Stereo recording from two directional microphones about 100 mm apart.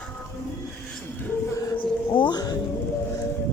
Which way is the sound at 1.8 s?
55° left (ahead or behind).